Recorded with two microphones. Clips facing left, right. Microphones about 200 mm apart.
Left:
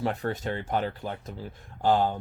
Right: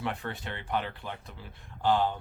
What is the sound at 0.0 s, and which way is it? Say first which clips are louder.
Speech: left 6 dB; 40° left (ahead or behind).